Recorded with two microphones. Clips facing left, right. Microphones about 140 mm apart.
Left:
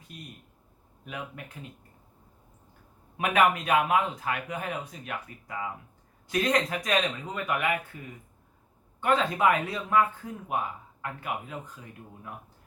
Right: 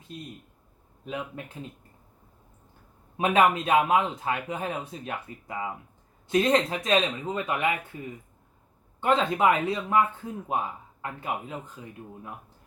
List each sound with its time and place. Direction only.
3.2 s speech: 25° right (ahead or behind)
9.0 s speech: 25° right (ahead or behind)